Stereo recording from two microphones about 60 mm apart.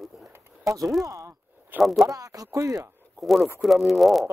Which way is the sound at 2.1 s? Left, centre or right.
Right.